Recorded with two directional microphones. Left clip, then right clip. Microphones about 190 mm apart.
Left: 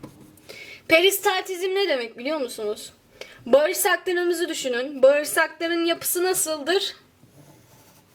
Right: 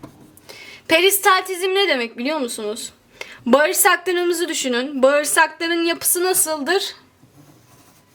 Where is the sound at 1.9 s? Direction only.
25° right (ahead or behind).